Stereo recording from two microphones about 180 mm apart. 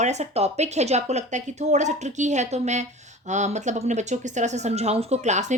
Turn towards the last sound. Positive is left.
turn(degrees=-40)  # may be behind; listen again after turning